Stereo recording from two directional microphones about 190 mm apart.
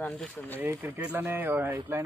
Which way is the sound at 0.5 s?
10° right (ahead or behind).